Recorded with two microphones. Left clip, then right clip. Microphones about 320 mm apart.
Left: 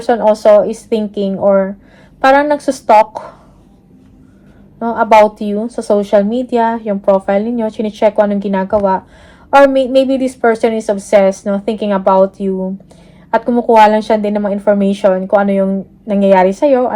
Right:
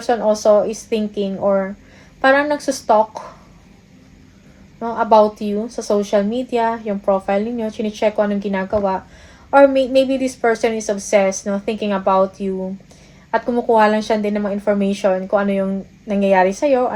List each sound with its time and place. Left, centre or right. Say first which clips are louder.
0.0 s speech: left 6 dB; left
4.8 s speech: left 5 dB; left